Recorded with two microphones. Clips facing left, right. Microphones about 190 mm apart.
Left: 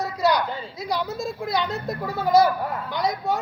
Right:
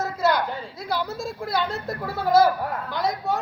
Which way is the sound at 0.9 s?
Centre (ahead or behind).